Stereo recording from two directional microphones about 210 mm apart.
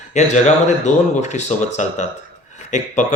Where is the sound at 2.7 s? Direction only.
35° left (ahead or behind).